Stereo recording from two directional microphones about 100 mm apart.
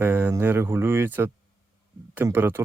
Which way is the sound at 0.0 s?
20° right (ahead or behind).